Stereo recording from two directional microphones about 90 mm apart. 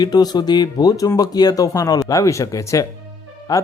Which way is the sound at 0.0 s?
50° left (ahead or behind).